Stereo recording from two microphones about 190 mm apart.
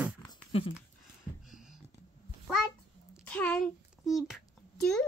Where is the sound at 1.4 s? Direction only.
Centre (ahead or behind).